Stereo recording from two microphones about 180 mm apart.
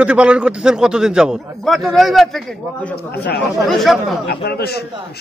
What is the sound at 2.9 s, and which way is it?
Speech, 65° left (ahead or behind).